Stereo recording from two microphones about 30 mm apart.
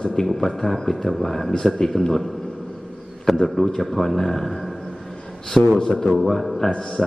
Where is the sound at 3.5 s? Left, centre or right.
Centre.